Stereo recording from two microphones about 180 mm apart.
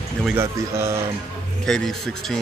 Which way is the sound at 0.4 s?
15° right (ahead or behind).